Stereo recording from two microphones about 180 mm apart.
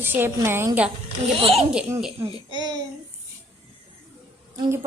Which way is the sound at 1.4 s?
35° right (ahead or behind).